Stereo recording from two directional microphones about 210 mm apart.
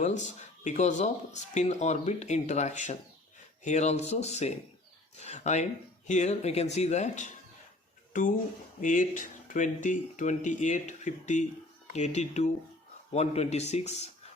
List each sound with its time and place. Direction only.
0.0 s speech: 35° left (ahead or behind)